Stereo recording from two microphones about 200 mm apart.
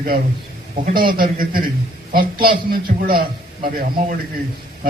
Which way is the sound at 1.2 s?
45° right (ahead or behind).